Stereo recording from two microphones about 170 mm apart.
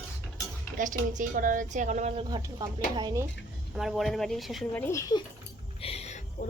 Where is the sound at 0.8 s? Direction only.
50° right (ahead or behind).